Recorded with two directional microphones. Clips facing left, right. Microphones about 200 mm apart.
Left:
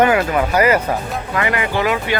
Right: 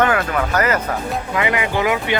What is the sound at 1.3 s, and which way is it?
Speech, 15° right (ahead or behind).